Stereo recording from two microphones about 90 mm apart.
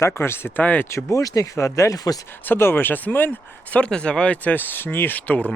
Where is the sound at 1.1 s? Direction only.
40° left (ahead or behind).